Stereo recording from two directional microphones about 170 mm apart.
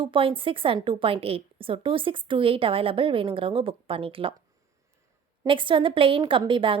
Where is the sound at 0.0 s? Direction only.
30° right (ahead or behind).